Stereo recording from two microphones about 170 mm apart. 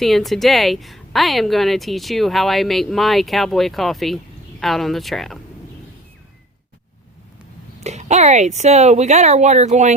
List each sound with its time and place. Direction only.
0.0 s a woman's voice: centre (ahead or behind)
7.9 s speech: 40° right (ahead or behind)